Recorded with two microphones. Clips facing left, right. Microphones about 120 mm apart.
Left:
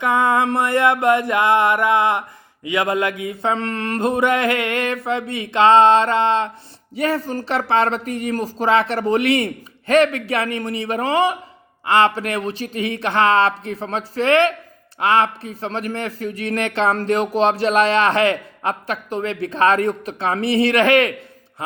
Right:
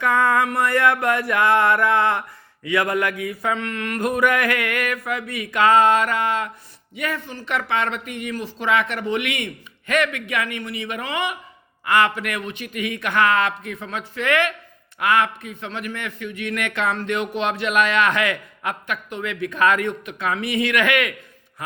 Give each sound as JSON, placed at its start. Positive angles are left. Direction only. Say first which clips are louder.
{"t": 0.0, "sound": "a man's voice", "louder": "left 2 dB", "side_deg": 20}